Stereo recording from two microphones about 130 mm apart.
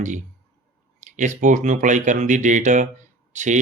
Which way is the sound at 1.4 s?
70° right (ahead or behind).